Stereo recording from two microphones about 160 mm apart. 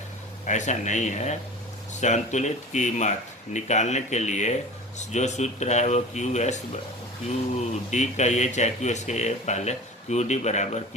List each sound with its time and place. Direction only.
0.4 s speech: 50° left (ahead or behind)
7.9 s speech: 45° left (ahead or behind)